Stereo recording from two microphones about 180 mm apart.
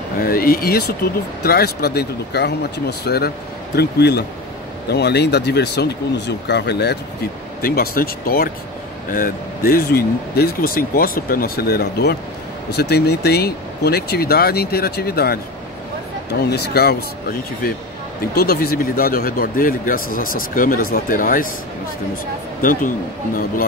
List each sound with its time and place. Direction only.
0.2 s speech: 55° left (ahead or behind)
7.6 s speech: 55° left (ahead or behind)
16.4 s a man's voice: 65° left (ahead or behind)
22.6 s a man's voice: 50° left (ahead or behind)